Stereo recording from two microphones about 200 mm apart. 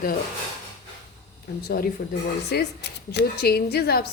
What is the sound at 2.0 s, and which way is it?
Speech, 55° left (ahead or behind).